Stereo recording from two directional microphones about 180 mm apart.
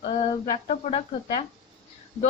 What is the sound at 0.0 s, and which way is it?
A woman's voice, 35° left (ahead or behind).